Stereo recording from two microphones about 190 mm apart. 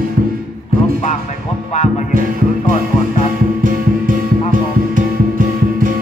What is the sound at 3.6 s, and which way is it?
Music, 45° right (ahead or behind).